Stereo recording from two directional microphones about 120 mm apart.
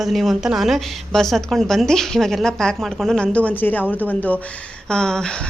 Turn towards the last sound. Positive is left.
turn(degrees=5)  # may be behind; listen again after turning